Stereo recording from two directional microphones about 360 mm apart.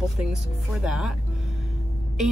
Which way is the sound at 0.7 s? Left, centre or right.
Centre.